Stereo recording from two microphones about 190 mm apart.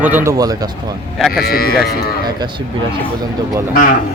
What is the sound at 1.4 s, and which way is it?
Speech, 50° left (ahead or behind).